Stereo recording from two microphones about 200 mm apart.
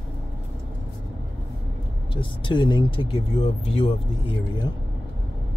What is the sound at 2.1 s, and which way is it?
Speech, 25° left (ahead or behind).